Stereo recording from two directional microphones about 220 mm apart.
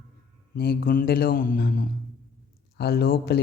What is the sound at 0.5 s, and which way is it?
Speech, 45° left (ahead or behind).